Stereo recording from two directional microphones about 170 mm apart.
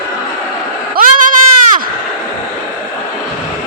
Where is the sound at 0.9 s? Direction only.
55° right (ahead or behind).